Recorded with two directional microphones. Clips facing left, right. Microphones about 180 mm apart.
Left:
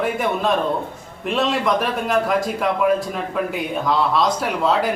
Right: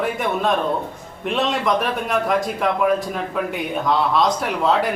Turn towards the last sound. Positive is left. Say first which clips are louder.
# even
turn(degrees=0)  # may be behind; listen again after turning